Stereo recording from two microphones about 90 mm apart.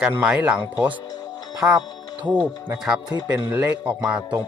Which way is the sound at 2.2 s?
15° right (ahead or behind).